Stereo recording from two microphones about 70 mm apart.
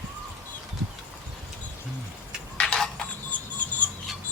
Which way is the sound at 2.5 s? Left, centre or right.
Centre.